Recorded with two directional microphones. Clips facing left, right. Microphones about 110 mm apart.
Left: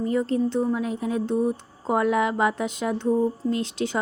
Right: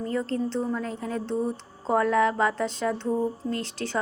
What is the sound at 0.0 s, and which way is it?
A woman's voice, 15° left (ahead or behind).